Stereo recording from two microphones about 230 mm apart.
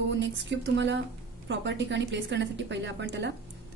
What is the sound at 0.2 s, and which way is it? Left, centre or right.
A woman's voice, right.